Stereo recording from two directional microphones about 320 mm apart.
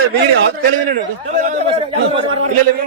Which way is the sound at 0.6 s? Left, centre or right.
Right.